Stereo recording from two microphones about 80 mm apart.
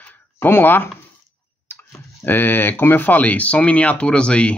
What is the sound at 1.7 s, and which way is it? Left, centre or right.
Speech, left.